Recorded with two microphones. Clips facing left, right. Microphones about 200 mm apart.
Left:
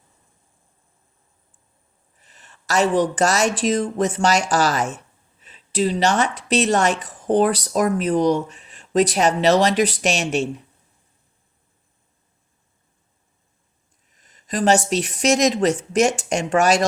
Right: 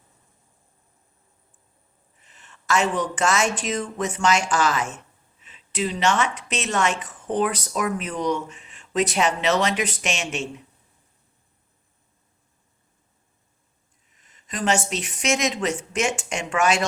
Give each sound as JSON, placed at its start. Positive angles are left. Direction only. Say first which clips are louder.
{"t": 2.2, "sound": "speech", "louder": "right 3 dB", "side_deg": 40}
{"t": 14.2, "sound": "speech", "louder": "left 6 dB", "side_deg": 40}